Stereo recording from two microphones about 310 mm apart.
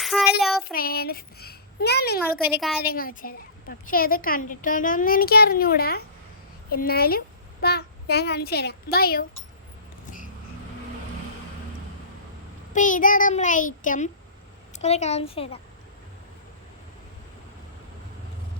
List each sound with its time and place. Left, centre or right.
0.0 s child singing: centre
0.7 s a child's voice: left
2.4 s a woman's voice: centre
2.8 s a woman's voice: left
12.7 s a woman's voice: left